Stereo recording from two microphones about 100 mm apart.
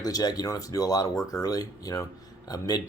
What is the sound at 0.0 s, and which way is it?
Speech, 40° left (ahead or behind).